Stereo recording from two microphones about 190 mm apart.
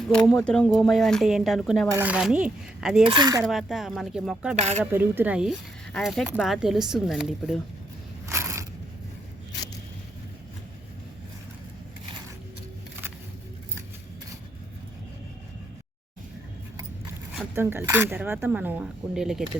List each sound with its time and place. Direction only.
0.0 s speech: 5° left (ahead or behind)
3.0 s speech: 25° right (ahead or behind)
3.4 s speech: centre (ahead or behind)
4.5 s speech: 35° right (ahead or behind)
4.8 s speech: 10° right (ahead or behind)
8.3 s a sound: 15° right (ahead or behind)
17.5 s speech: 10° right (ahead or behind)